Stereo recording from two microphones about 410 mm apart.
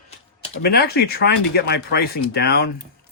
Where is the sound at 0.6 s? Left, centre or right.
Left.